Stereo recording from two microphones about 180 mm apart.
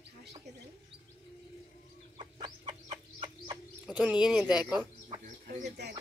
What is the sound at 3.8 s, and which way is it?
Speech, 5° right (ahead or behind).